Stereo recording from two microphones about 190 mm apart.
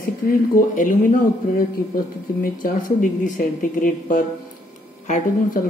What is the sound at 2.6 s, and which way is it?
Speech, 45° left (ahead or behind).